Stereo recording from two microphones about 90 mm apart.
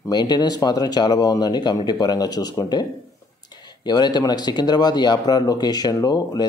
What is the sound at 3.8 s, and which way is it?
Speech, 50° left (ahead or behind).